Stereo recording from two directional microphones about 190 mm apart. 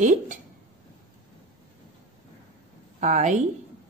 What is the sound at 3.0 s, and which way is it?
Speech, 40° right (ahead or behind).